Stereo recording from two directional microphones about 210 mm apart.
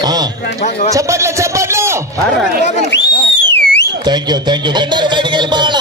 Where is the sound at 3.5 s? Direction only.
55° left (ahead or behind).